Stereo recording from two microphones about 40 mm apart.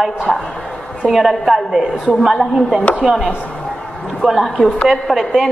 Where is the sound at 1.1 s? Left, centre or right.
Centre.